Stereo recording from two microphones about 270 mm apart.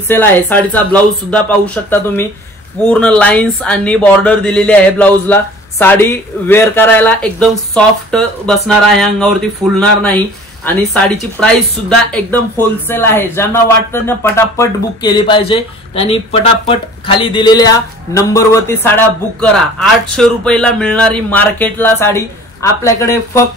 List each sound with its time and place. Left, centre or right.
0.1 s speech: centre